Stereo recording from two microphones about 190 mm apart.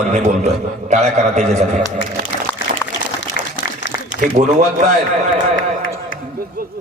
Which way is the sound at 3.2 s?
80° left.